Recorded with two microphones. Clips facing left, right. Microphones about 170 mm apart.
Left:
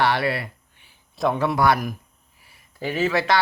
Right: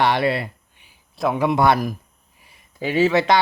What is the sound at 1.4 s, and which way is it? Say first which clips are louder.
Speech: right 4 dB; 20° right (ahead or behind).